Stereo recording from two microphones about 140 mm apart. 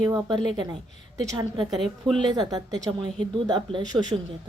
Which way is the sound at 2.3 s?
30° right (ahead or behind).